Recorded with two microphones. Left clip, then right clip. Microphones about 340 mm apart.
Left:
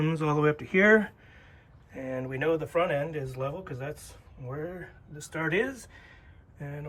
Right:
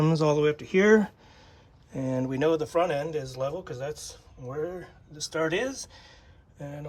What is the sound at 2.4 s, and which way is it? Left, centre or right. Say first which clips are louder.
Speech: right 2 dB; right.